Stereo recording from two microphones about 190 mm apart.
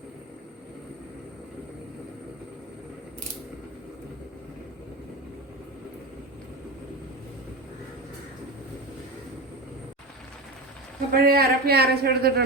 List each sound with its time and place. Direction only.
11.1 s speech: 55° right (ahead or behind)